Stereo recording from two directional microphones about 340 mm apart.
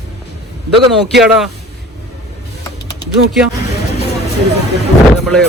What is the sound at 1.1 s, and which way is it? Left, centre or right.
Speech, centre.